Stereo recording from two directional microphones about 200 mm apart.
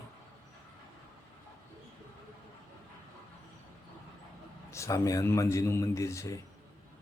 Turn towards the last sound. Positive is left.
turn(degrees=15)  # may be behind; listen again after turning